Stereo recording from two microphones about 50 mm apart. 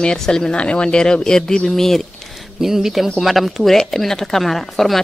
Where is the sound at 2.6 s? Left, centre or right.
Centre.